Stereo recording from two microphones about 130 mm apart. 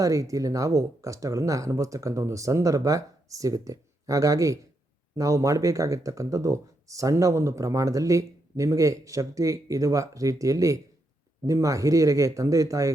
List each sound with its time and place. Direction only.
0.0 s speech: 25° right (ahead or behind)